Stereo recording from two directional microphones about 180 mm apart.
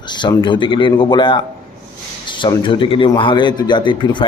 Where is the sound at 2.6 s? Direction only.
25° left (ahead or behind).